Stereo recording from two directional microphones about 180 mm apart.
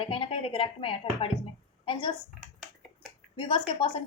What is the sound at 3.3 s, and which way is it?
Speech, 25° left (ahead or behind).